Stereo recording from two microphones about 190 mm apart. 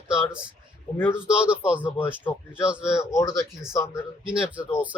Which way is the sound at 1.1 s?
5° right (ahead or behind).